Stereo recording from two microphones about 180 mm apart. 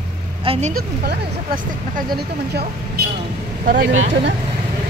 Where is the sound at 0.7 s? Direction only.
55° right (ahead or behind).